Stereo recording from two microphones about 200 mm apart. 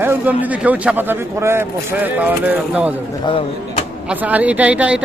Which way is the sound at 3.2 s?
25° left (ahead or behind).